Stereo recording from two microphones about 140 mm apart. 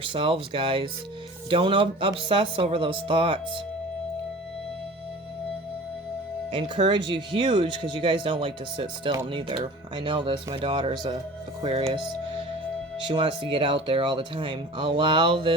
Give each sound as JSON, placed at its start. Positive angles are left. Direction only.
{"t": 0.0, "sound": "speech", "side_deg": -40}
{"t": 6.5, "sound": "speech", "side_deg": -35}
{"t": 11.6, "sound": "speech", "side_deg": -45}
{"t": 13.1, "sound": "speech", "side_deg": -35}